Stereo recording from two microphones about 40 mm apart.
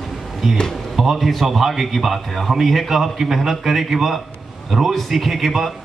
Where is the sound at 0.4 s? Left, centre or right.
Centre.